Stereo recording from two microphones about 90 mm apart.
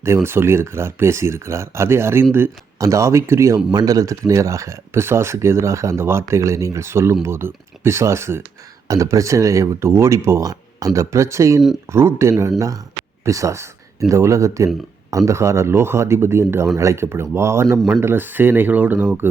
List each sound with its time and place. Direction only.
0.0 s speech: 30° right (ahead or behind)